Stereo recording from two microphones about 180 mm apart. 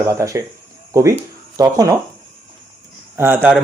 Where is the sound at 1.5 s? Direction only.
20° right (ahead or behind).